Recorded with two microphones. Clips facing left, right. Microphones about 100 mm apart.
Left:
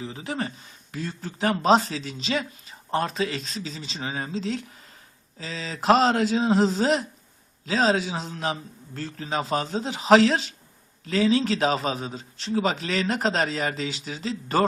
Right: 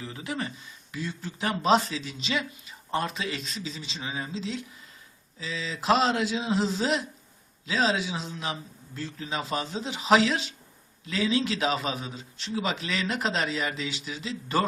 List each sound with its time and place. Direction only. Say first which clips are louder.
0.0 s a man's voice: left 3 dB; 25° left (ahead or behind); by 14.6 s 40° left (ahead or behind)